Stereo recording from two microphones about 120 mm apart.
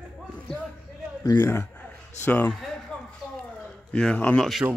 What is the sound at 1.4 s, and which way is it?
Speech, 20° left (ahead or behind).